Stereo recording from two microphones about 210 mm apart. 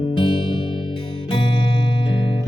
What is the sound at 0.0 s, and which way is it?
Music, 20° left (ahead or behind).